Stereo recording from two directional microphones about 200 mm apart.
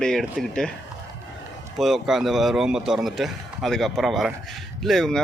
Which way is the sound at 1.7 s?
Centre (ahead or behind).